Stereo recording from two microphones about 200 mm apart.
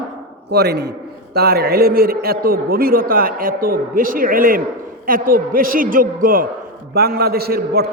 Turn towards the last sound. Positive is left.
turn(degrees=-50)  # may be behind; listen again after turning